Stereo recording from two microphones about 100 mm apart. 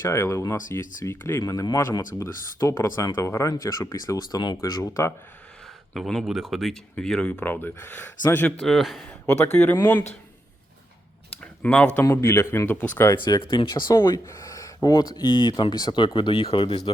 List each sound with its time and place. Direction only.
0.0 s speech: 25° left (ahead or behind)
1.4 s speech: 35° left (ahead or behind)
4.8 s speech: 30° left (ahead or behind)
5.9 s speech: 5° left (ahead or behind); by 8.5 s 20° left (ahead or behind)
8.6 s speech: centre (ahead or behind)
9.2 s speech: 15° left (ahead or behind)
11.6 s speech: 10° left (ahead or behind)
12.1 s speech: 25° left (ahead or behind)
13.2 s speech: 50° left (ahead or behind)
13.9 s speech: 40° left (ahead or behind); by 16.9 s 60° left (ahead or behind)